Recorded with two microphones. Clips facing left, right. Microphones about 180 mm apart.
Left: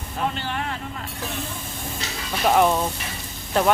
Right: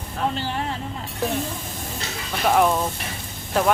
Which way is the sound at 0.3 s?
30° right (ahead or behind).